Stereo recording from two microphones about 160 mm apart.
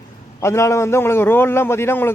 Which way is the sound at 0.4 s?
15° left (ahead or behind).